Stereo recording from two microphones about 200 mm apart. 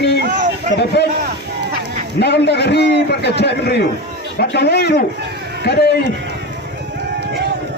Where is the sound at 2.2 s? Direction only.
55° left (ahead or behind).